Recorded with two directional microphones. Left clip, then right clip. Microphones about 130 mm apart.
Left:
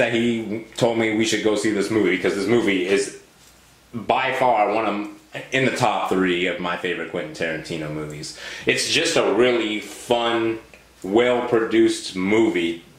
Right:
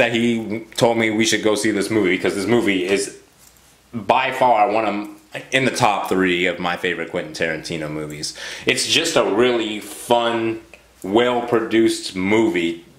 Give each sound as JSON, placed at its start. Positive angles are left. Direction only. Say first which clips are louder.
{"t": 0.0, "sound": "speech", "louder": "right 2 dB", "side_deg": -35}
{"t": 4.1, "sound": "speech", "louder": "right 3 dB", "side_deg": -35}